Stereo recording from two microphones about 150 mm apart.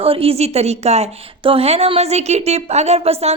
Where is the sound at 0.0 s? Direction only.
40° right (ahead or behind).